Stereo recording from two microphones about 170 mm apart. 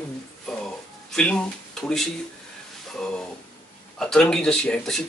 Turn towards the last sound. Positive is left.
turn(degrees=5)  # may be behind; listen again after turning